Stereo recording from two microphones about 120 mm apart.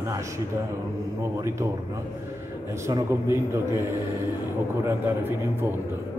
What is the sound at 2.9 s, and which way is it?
Speech, 25° right (ahead or behind).